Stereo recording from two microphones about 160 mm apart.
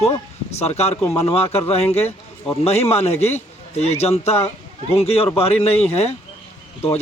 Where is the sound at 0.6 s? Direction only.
40° left (ahead or behind).